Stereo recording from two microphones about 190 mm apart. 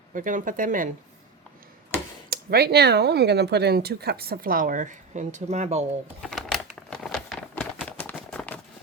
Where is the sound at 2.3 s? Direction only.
55° right (ahead or behind); by 5.8 s 35° right (ahead or behind).